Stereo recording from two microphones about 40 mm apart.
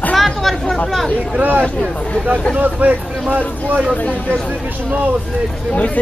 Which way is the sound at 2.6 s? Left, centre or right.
Right.